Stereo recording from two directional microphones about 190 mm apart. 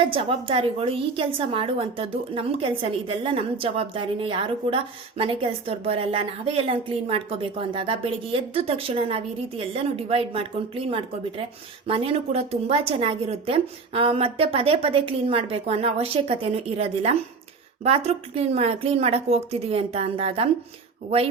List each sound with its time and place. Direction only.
0.0 s a woman's voice: 30° right (ahead or behind)